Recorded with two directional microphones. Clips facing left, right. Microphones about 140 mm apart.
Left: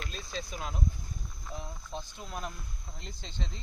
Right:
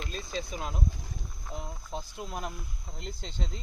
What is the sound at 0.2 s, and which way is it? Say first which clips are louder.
Speech: right 4 dB; 5° right (ahead or behind).